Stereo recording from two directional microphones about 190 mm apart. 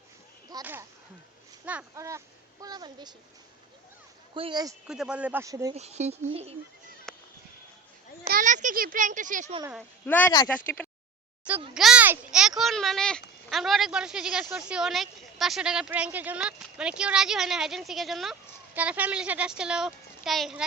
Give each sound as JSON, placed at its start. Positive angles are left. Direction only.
{"t": 0.6, "sound": "a child's voice", "side_deg": -10}
{"t": 4.4, "sound": "a child's voice", "side_deg": -25}
{"t": 4.9, "sound": "speech", "side_deg": -5}
{"t": 5.7, "sound": "speech", "side_deg": -35}
{"t": 7.1, "sound": "a sound", "side_deg": 0}
{"t": 8.2, "sound": "a child's voice", "side_deg": -45}
{"t": 10.1, "sound": "speech", "side_deg": 10}
{"t": 11.7, "sound": "speech", "side_deg": -5}